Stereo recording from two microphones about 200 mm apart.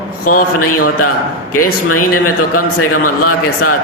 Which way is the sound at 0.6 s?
90° left.